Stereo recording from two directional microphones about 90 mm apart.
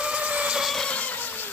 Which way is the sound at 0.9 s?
15° left (ahead or behind).